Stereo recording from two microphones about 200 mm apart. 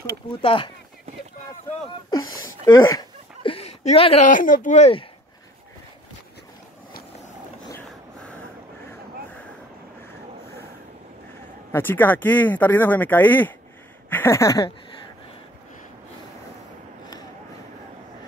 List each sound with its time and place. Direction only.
0.4 s speech: 25° left (ahead or behind)
2.0 s speech: 20° left (ahead or behind); by 5.0 s 35° left (ahead or behind)
7.7 s vehicle: 5° left (ahead or behind)
11.7 s speech: 10° left (ahead or behind)